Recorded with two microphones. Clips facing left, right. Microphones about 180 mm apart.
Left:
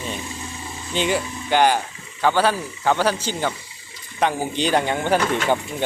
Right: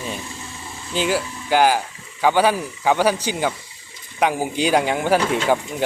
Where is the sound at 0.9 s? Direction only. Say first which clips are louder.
Right 1 dB; 5° right (ahead or behind).